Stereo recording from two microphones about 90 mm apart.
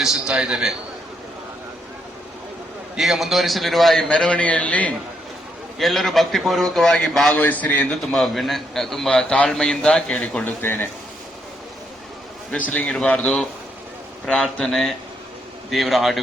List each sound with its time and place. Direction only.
0.0 s a man's voice: 5° right (ahead or behind)
2.9 s a man's voice: 5° right (ahead or behind); by 4.9 s 15° left (ahead or behind)
5.8 s a man's voice: centre (ahead or behind)
7.3 s a man's voice: 20° left (ahead or behind)
8.0 s a man's voice: 5° left (ahead or behind); by 10.8 s 25° left (ahead or behind)
12.7 s a man's voice: 10° left (ahead or behind)